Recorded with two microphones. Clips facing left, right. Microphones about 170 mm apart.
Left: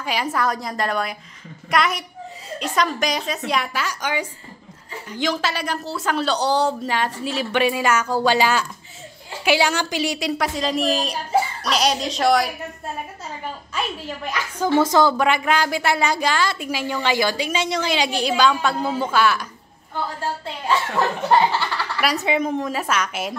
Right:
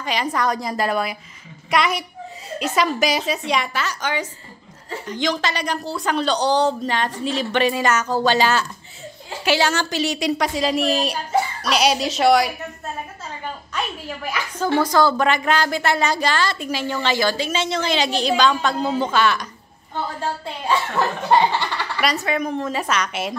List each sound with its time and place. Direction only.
0.0 s a woman's voice: 5° left (ahead or behind)
14.6 s a woman's voice: 20° left (ahead or behind)
15.1 s a woman's voice: 10° left (ahead or behind)
21.3 s a sound: 20° right (ahead or behind)
22.2 s a woman's voice: 20° left (ahead or behind)
22.7 s speech: 5° left (ahead or behind)